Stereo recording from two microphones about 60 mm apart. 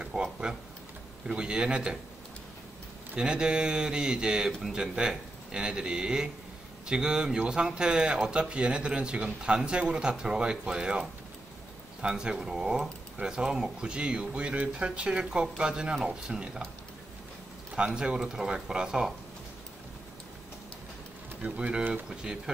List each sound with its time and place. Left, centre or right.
0.0 s a sound: centre
1.2 s speech: centre
3.2 s speech: centre
4.5 s speech: centre
4.7 s speech: centre
17.7 s speech: centre
21.4 s speech: centre